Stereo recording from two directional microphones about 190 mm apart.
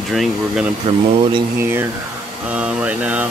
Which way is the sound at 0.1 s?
Centre (ahead or behind).